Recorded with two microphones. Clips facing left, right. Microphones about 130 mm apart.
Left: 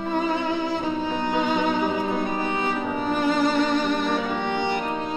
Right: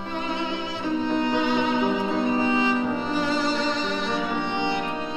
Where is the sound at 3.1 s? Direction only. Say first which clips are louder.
Left 6 dB; 55° left (ahead or behind).